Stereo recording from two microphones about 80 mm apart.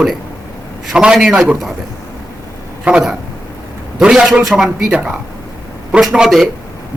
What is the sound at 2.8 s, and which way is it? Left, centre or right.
A man's voice, centre.